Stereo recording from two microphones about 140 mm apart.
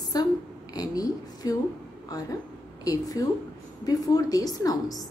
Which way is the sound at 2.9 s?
25° left (ahead or behind).